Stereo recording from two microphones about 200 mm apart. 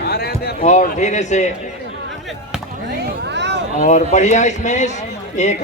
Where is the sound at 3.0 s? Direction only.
60° right (ahead or behind).